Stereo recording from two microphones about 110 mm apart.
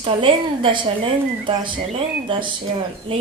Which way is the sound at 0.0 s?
55° right (ahead or behind).